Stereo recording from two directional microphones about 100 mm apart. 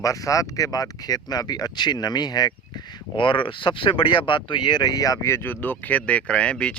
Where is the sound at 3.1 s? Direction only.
55° left (ahead or behind); by 6.7 s 10° left (ahead or behind).